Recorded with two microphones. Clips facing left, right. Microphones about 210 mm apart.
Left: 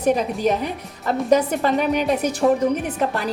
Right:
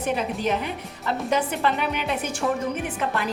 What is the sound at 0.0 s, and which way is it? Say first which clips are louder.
A woman's voice: left 6 dB; 40° left (ahead or behind).